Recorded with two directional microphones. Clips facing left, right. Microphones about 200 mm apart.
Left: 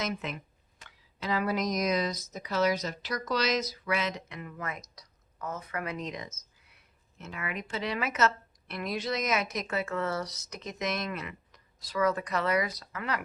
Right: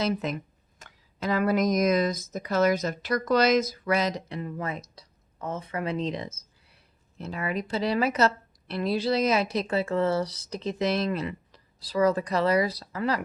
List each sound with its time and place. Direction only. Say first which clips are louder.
0.0 s speech: right 7 dB; 35° right (ahead or behind)
0.8 s speech: right 6 dB; 45° right (ahead or behind)